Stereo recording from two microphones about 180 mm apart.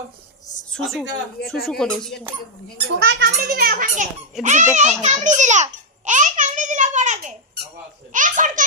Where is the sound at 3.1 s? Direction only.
65° right (ahead or behind); by 4.1 s 45° right (ahead or behind).